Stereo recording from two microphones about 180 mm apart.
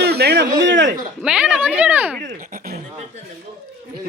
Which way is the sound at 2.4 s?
55° right (ahead or behind).